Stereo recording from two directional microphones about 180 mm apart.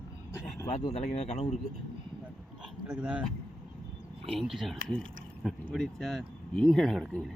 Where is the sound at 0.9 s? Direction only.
40° left (ahead or behind).